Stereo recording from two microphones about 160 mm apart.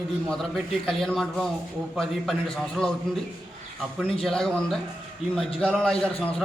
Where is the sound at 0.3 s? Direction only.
5° left (ahead or behind).